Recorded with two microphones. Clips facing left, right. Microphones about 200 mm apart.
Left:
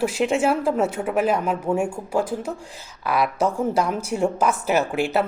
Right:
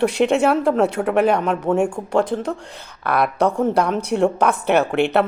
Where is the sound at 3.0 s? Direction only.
55° right (ahead or behind).